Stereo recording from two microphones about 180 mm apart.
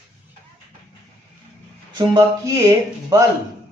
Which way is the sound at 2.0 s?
20° right (ahead or behind).